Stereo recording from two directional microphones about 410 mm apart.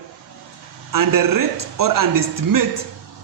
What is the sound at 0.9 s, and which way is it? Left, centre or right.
A man's voice, right.